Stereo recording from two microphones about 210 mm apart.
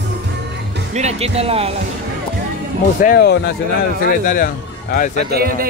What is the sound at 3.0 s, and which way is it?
Speech, 45° left (ahead or behind).